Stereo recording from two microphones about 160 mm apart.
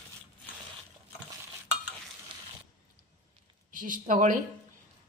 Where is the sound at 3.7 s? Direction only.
60° right (ahead or behind).